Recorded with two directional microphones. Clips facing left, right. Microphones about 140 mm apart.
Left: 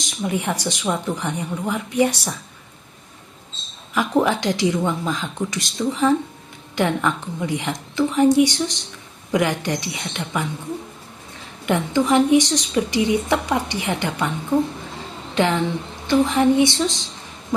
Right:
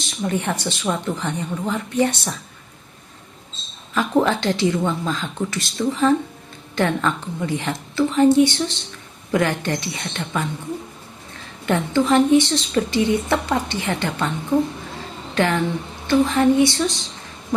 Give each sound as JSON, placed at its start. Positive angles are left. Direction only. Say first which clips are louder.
{"t": 0.3, "sound": "a woman's voice", "louder": "even", "side_deg": 10}
{"t": 3.9, "sound": "a woman's voice", "louder": "even", "side_deg": 15}
{"t": 15.4, "sound": "a woman's voice", "louder": "even", "side_deg": 15}